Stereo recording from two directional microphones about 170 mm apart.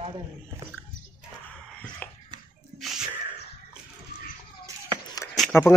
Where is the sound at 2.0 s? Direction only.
10° left (ahead or behind).